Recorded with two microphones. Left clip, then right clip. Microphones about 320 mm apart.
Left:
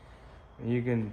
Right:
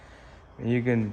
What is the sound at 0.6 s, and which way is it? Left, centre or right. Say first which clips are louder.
Speech: right 5 dB; right.